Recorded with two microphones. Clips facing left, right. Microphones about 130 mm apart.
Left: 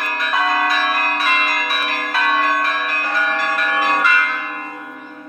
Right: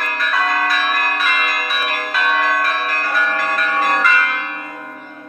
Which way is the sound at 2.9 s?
25° left (ahead or behind).